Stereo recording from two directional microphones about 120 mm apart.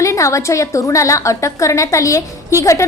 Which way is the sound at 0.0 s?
25° left (ahead or behind).